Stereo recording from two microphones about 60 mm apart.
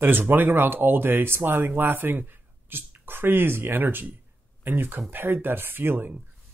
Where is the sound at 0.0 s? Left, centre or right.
Right.